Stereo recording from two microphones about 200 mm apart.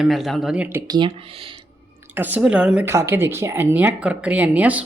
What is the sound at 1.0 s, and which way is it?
Speech, 25° right (ahead or behind).